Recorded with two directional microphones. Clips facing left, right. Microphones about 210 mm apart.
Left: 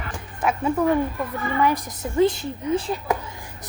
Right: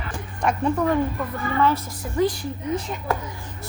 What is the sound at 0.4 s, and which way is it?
Speech, 5° left (ahead or behind).